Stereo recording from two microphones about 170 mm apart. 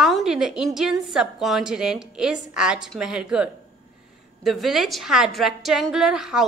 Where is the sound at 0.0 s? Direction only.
Centre (ahead or behind).